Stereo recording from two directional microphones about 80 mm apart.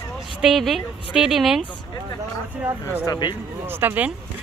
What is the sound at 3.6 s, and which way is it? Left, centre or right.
Speech, right.